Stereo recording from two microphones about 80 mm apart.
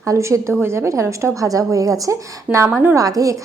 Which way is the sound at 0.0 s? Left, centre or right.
Right.